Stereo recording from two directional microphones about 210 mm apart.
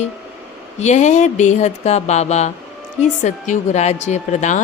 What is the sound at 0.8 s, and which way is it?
Speech, 35° left (ahead or behind).